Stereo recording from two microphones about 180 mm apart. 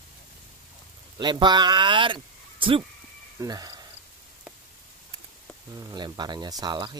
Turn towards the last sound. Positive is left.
turn(degrees=-25)  # may be behind; listen again after turning